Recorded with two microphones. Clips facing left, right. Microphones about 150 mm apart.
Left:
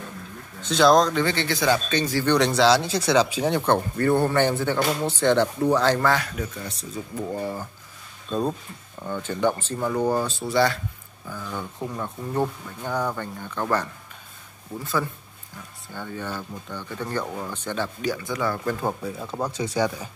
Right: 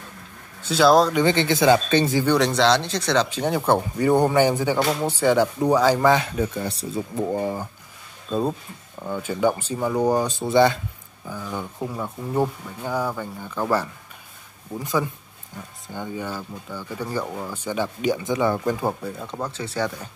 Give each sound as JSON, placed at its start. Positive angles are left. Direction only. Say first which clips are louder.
{"t": 0.6, "sound": "speech", "louder": "right 1 dB", "side_deg": -5}
{"t": 1.2, "sound": "a man's voice", "louder": "right 5 dB", "side_deg": -20}
{"t": 2.3, "sound": "speech", "louder": "left 2 dB", "side_deg": 0}
{"t": 8.3, "sound": "speech", "louder": "right 2 dB", "side_deg": -5}
{"t": 18.8, "sound": "speech", "louder": "right 1 dB", "side_deg": -5}